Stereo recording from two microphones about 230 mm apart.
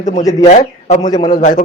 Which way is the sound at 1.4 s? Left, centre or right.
Left.